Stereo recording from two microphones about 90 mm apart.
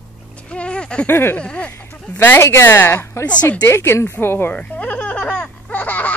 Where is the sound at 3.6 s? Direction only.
30° left (ahead or behind).